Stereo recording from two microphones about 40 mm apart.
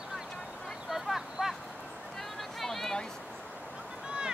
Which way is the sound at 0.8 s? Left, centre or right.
Centre.